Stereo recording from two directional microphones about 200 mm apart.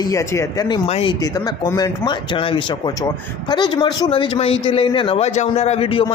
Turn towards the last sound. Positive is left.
turn(degrees=25)  # may be behind; listen again after turning